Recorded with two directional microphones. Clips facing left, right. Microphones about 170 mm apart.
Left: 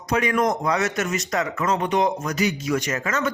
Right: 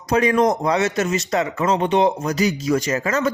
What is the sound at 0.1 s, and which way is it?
Speech, 30° right (ahead or behind).